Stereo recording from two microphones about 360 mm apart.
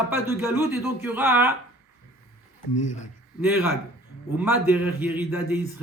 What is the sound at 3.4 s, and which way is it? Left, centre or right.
A man's voice, centre.